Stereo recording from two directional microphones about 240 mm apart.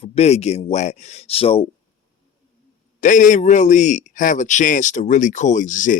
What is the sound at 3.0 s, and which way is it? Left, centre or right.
A man's voice, left.